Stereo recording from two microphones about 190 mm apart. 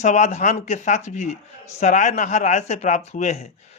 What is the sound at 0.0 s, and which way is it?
A man's voice, 35° left (ahead or behind).